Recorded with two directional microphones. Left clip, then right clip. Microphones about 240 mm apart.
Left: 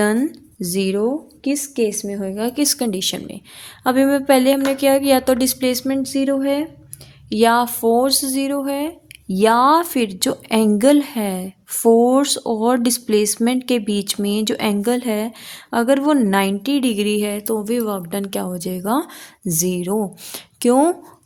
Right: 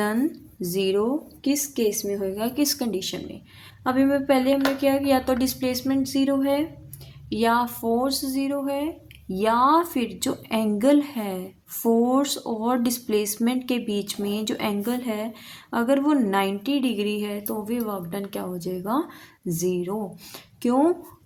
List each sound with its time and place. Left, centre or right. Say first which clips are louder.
0.0 s a woman's voice: left 6 dB; left